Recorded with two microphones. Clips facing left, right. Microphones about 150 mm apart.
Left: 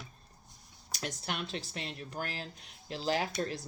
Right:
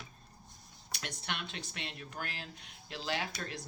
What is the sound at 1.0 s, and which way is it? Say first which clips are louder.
Speech: left 4 dB; 35° left (ahead or behind).